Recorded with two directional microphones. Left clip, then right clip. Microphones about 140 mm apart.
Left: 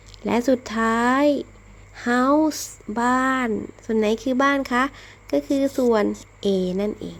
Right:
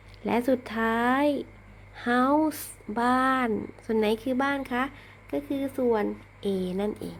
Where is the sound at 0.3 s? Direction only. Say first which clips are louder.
Left 5 dB; 25° left (ahead or behind).